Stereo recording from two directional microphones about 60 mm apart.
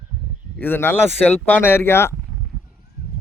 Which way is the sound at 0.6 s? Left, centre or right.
Left.